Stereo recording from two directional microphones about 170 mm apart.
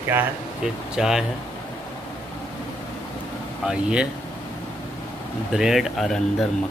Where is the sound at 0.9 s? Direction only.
Centre (ahead or behind).